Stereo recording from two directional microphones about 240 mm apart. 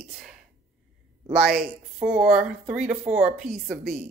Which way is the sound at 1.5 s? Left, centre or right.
Right.